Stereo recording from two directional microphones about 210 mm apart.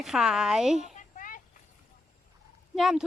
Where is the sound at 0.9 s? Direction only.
40° left (ahead or behind).